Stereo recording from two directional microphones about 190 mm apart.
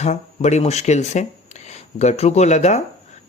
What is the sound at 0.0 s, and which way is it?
Speech, 35° left (ahead or behind).